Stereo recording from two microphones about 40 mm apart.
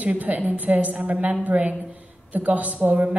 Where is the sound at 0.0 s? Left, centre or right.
Right.